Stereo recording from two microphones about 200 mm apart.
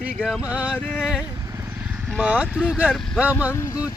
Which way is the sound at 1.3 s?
15° right (ahead or behind).